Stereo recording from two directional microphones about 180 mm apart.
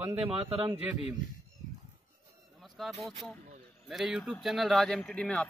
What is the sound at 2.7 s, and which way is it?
A man's voice, centre (ahead or behind).